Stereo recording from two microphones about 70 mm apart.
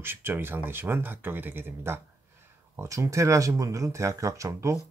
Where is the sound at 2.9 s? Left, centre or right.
Right.